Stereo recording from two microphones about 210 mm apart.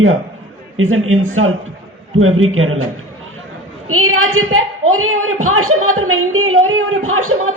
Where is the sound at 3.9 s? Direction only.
90° right.